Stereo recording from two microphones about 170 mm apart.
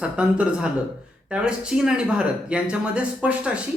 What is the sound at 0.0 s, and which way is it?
A man's voice, 5° right (ahead or behind).